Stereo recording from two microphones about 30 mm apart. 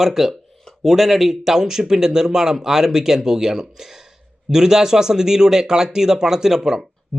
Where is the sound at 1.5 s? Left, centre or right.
Centre.